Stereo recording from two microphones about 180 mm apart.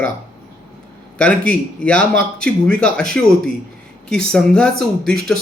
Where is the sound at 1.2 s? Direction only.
5° left (ahead or behind).